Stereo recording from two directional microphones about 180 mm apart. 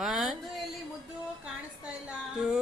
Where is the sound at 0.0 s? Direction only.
Centre (ahead or behind).